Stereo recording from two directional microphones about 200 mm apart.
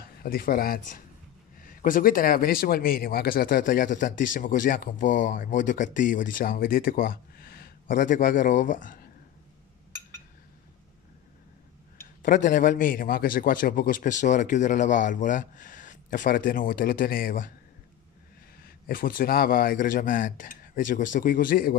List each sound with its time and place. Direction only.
0.0 s a man's voice: 45° left (ahead or behind)
12.2 s a man's voice: 40° left (ahead or behind)
18.6 s a man's voice: 45° left (ahead or behind)